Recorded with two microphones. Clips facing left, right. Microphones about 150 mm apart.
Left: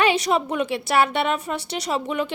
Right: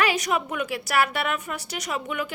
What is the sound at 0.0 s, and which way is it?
A woman's voice, 30° left (ahead or behind).